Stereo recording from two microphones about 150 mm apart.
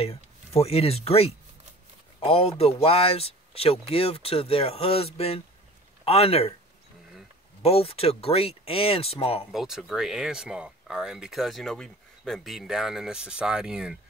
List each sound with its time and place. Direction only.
0.0 s speech: 45° left (ahead or behind)
7.6 s speech: 40° left (ahead or behind)
9.5 s speech: centre (ahead or behind)